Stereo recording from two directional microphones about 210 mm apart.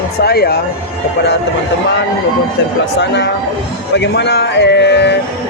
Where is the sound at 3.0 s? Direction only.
55° left (ahead or behind).